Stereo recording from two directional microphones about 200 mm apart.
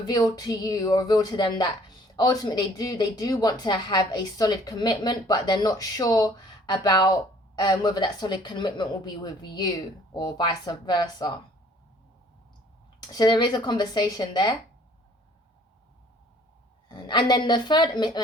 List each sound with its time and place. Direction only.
0.1 s a woman's voice: 20° left (ahead or behind)
13.1 s a woman's voice: 20° left (ahead or behind)
16.9 s a woman's voice: 25° left (ahead or behind)